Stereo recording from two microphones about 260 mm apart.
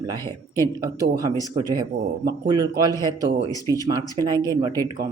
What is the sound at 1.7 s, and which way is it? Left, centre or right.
Speech, centre.